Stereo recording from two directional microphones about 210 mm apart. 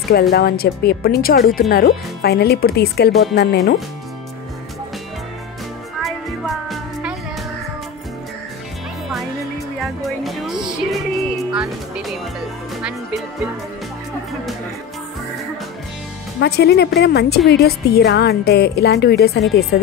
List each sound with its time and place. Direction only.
0.1 s a woman's voice: 50° left (ahead or behind)
6.0 s music: centre (ahead or behind)
9.8 s music: centre (ahead or behind)
16.3 s a woman's voice: 50° left (ahead or behind)